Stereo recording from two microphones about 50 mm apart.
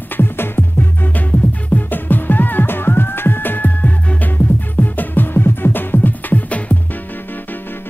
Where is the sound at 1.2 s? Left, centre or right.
Left.